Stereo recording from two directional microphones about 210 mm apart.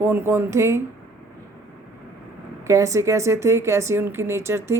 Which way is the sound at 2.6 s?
15° right (ahead or behind).